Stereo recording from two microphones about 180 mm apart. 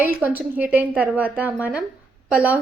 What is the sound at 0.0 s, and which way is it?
A woman's voice, 10° right (ahead or behind).